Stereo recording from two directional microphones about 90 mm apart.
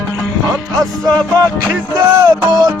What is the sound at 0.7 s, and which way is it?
Music, 45° right (ahead or behind).